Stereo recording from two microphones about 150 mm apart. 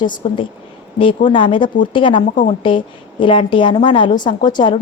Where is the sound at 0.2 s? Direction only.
35° left (ahead or behind).